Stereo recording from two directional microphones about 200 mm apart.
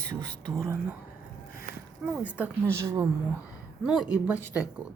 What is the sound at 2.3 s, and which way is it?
Speech, 10° right (ahead or behind).